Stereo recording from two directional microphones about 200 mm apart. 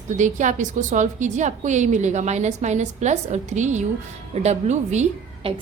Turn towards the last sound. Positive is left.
turn(degrees=-30)  # may be behind; listen again after turning